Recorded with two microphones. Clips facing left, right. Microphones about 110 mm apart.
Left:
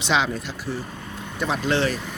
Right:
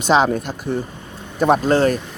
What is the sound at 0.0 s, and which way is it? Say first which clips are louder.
Speech: right 7 dB; 45° right (ahead or behind).